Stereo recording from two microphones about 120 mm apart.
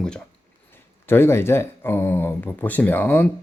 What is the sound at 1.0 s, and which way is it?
Speech, 20° left (ahead or behind).